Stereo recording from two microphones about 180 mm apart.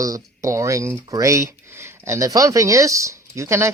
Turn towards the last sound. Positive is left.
turn(degrees=-15)  # may be behind; listen again after turning